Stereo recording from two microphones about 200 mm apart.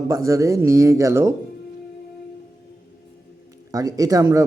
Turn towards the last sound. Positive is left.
turn(degrees=-15)  # may be behind; listen again after turning